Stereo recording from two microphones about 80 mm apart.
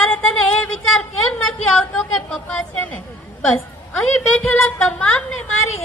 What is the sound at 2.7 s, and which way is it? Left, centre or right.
A woman's voice, centre.